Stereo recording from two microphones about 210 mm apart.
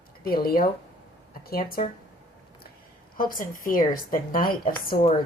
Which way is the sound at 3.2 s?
40° left (ahead or behind).